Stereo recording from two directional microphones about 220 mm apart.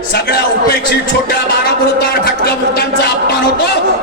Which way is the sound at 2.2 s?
45° left (ahead or behind).